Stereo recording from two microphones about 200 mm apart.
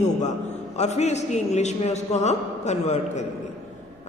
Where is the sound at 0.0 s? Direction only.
35° left (ahead or behind).